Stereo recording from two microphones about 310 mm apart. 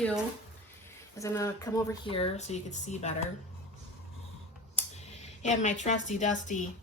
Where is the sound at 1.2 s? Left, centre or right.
Centre.